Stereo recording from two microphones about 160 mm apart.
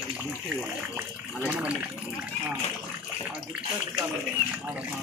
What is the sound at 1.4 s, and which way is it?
Speech, 10° right (ahead or behind).